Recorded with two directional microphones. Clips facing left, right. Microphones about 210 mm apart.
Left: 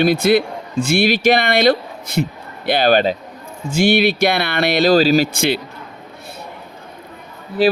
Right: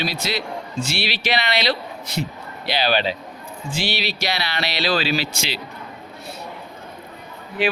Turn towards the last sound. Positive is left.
turn(degrees=35)  # may be behind; listen again after turning